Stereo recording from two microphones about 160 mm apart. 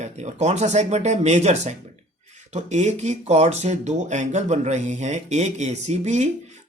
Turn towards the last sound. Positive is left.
turn(degrees=-45)  # may be behind; listen again after turning